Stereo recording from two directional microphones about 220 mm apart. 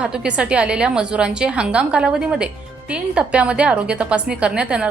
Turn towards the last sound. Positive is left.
turn(degrees=-5)  # may be behind; listen again after turning